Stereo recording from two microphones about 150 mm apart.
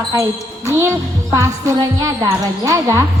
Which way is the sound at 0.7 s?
20° right (ahead or behind).